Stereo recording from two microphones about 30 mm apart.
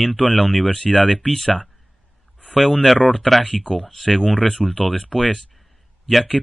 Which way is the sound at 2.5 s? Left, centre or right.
Centre.